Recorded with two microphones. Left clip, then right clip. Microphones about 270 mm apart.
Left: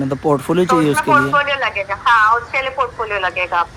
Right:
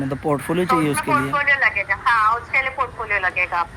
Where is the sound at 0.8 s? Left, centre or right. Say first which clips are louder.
Left 6 dB; left.